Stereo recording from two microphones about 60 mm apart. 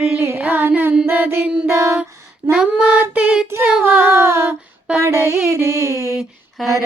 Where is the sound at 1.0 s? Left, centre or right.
Right.